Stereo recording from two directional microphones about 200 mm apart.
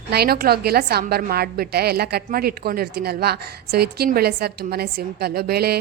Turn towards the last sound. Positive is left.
turn(degrees=-50)  # may be behind; listen again after turning